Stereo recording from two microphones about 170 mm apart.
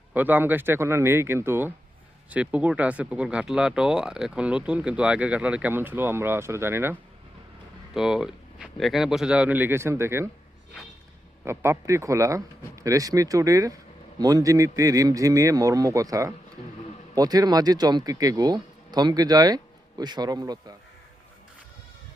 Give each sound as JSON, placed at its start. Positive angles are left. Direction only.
{"t": 0.1, "sound": "speech", "side_deg": -10}
{"t": 7.9, "sound": "speech", "side_deg": -5}
{"t": 11.4, "sound": "speech", "side_deg": -15}